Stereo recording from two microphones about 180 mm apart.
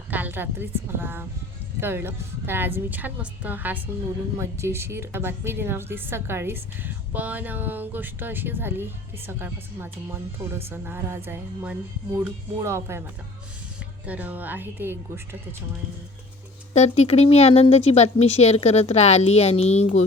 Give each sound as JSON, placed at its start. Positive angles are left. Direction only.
{"t": 0.1, "sound": "a woman's voice", "side_deg": -10}
{"t": 14.1, "sound": "a woman's voice", "side_deg": -10}
{"t": 16.7, "sound": "speech", "side_deg": 35}